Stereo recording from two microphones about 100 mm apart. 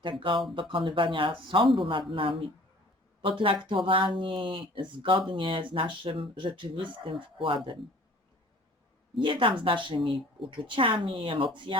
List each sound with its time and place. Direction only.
0.0 s a woman's voice: 60° right (ahead or behind)
9.1 s a woman's voice: 60° right (ahead or behind)